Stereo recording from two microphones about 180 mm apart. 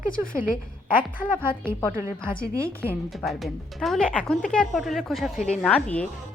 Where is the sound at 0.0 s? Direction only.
50° left (ahead or behind).